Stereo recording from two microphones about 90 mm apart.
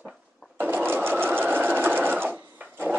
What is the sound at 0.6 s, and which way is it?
Sewing machine, 20° right (ahead or behind).